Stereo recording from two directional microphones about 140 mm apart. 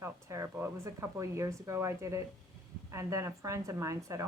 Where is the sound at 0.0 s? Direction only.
20° right (ahead or behind).